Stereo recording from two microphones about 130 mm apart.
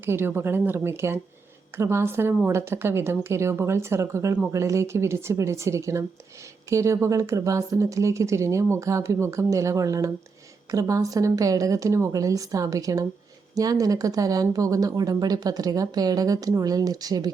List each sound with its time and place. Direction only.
0.0 s a woman's voice: 15° right (ahead or behind)